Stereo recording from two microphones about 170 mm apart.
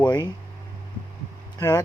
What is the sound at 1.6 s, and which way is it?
Speech, 20° left (ahead or behind).